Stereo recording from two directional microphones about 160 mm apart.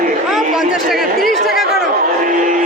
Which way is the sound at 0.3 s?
5° right (ahead or behind).